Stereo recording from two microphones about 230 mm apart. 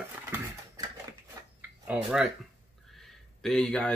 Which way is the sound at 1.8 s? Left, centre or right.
Centre.